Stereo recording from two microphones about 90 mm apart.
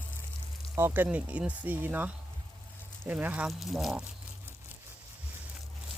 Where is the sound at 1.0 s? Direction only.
15° right (ahead or behind).